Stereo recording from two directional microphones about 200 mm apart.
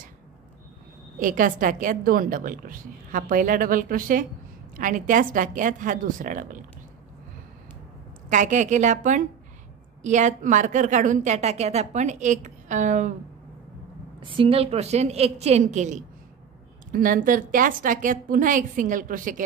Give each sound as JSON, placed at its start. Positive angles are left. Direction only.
{"t": 1.2, "sound": "a woman's voice", "side_deg": -40}
{"t": 8.3, "sound": "a woman's voice", "side_deg": -40}
{"t": 14.2, "sound": "a woman's voice", "side_deg": -25}